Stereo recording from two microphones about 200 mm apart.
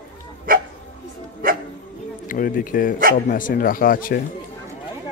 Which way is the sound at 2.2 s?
45° left (ahead or behind).